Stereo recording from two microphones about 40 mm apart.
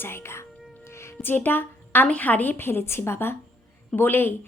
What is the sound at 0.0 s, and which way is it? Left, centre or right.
Speech, left.